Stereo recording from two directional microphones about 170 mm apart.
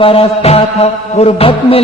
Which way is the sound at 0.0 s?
35° left (ahead or behind).